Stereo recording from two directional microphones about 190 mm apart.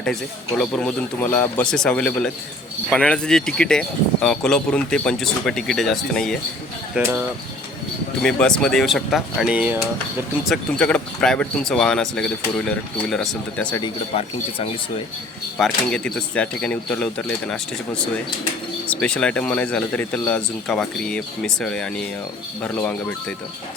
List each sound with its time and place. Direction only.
0.6 s speech: 5° left (ahead or behind)
6.9 s speech: 10° right (ahead or behind)
8.2 s speech: 5° left (ahead or behind)
13.8 s speech: 30° left (ahead or behind)
15.5 s speech: 5° left (ahead or behind)